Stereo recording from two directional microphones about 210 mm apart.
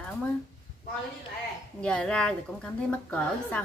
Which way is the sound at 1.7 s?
5° left (ahead or behind).